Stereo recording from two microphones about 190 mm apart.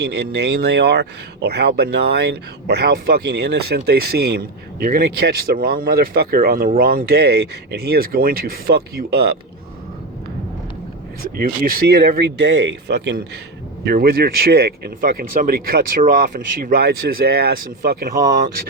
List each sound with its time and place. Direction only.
0.0 s speech: 60° right (ahead or behind)
11.3 s speech: 50° right (ahead or behind)
13.8 s speech: 55° right (ahead or behind)